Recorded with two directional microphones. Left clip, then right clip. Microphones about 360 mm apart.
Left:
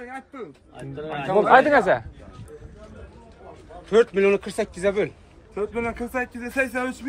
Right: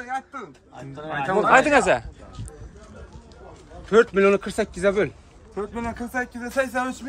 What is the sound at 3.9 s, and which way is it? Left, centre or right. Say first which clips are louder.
A man's voice: right 1 dB; right.